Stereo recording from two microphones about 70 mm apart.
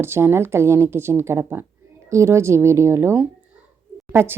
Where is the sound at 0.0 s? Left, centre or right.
Right.